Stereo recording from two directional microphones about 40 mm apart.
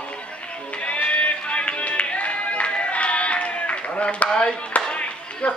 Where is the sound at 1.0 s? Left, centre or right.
Left.